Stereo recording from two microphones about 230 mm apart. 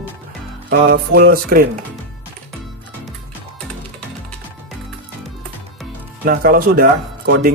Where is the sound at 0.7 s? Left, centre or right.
Right.